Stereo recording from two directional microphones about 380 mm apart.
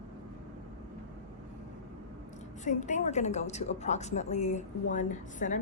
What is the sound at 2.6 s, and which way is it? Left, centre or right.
A woman's voice, centre.